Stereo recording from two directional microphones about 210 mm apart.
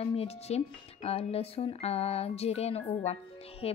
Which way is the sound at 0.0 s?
30° left (ahead or behind).